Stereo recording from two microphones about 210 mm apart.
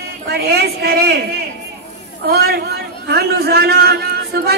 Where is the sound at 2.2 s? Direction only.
50° right (ahead or behind).